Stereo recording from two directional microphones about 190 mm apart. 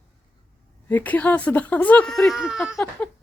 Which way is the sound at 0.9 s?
10° left (ahead or behind).